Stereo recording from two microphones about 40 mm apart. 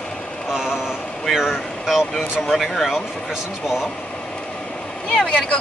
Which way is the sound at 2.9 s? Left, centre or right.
Centre.